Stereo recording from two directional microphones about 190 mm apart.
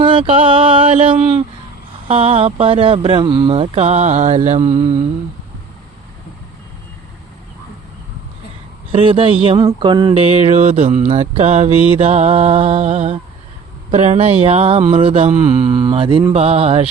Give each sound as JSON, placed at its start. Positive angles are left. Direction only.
{"t": 0.0, "sound": "speech", "side_deg": -25}
{"t": 2.0, "sound": "mantra", "side_deg": -30}
{"t": 8.9, "sound": "mantra", "side_deg": -30}